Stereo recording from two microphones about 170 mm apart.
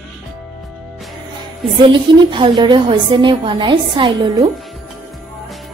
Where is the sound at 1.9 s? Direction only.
30° right (ahead or behind).